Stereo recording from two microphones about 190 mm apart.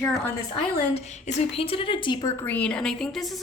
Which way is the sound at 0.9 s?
35° left (ahead or behind).